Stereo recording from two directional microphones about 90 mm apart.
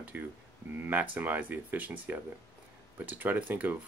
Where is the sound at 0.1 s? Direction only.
20° right (ahead or behind).